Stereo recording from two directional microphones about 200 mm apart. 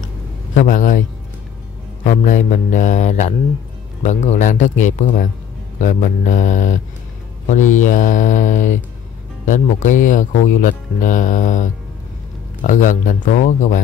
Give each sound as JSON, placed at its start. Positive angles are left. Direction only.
{"t": 0.6, "sound": "speech", "side_deg": 40}
{"t": 2.0, "sound": "speech", "side_deg": 40}